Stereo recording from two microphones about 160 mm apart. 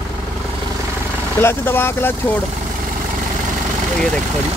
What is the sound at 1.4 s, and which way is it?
Speech, 15° left (ahead or behind).